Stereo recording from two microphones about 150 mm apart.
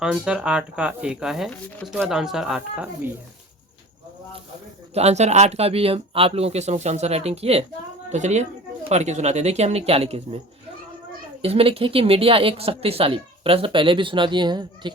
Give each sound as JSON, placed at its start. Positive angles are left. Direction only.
{"t": 0.0, "sound": "speech", "side_deg": -5}
{"t": 4.9, "sound": "speech", "side_deg": -45}
{"t": 11.4, "sound": "a woman's voice", "side_deg": -40}